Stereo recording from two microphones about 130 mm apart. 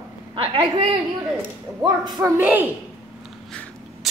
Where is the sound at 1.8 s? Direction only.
30° right (ahead or behind).